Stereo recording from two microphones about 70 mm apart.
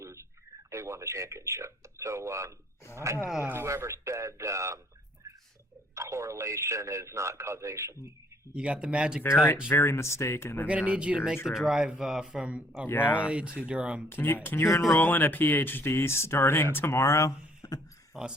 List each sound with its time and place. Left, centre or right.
0.0 s a sound: right
0.7 s a man's voice: right
5.9 s a man's voice: right
8.5 s speech: centre
9.6 s speech: left
10.7 s speech: centre
11.4 s speech: centre
12.9 s speech: left
13.2 s speech: centre
14.1 s speech: left
17.6 s a sound: left
18.1 s speech: centre